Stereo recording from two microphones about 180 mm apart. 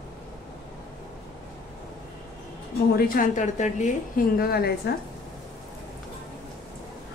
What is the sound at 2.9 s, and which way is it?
A woman's voice, 50° left (ahead or behind).